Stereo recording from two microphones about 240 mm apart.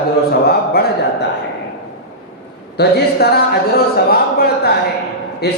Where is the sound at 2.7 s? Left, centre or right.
Left.